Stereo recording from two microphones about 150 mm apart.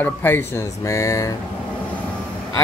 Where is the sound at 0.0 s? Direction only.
15° left (ahead or behind).